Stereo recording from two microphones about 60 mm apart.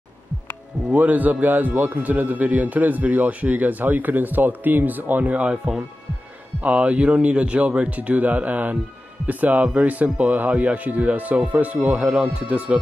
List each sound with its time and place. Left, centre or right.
0.9 s a man's voice: right
6.6 s a man's voice: right